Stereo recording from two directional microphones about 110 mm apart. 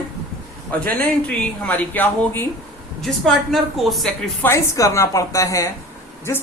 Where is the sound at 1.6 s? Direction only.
15° left (ahead or behind).